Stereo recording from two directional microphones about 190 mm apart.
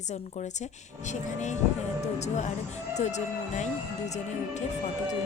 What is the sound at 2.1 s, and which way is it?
Speech, 35° left (ahead or behind).